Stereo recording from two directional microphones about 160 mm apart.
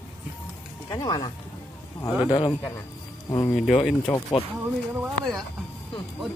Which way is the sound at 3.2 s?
20° left (ahead or behind).